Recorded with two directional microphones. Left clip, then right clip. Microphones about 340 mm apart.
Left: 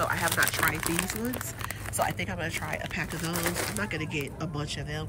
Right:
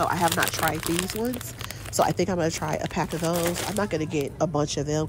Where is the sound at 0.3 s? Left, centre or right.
Centre.